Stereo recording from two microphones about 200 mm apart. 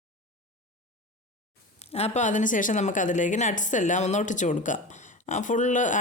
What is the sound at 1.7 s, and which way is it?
Speech, 30° left (ahead or behind).